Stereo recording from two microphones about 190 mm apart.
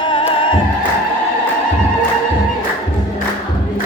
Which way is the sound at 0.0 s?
25° left (ahead or behind).